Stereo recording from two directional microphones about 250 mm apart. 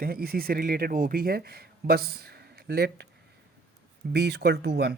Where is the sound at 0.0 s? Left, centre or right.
Right.